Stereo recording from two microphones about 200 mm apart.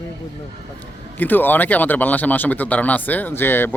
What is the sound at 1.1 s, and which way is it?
Speech, 10° left (ahead or behind).